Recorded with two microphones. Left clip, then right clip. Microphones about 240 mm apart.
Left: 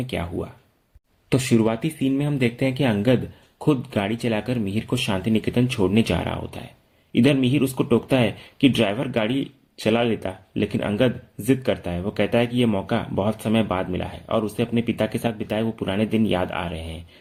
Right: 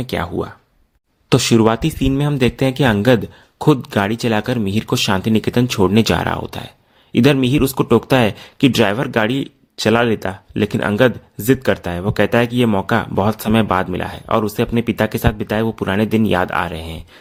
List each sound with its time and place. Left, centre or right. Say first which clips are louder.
0.0 s speech: right 7 dB; right